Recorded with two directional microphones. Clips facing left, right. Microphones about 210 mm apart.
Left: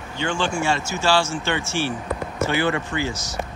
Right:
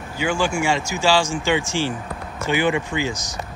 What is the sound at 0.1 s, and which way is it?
Speech, 10° right (ahead or behind).